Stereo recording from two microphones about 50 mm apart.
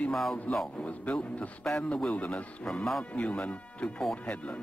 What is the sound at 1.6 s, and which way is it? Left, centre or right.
A man's voice, centre.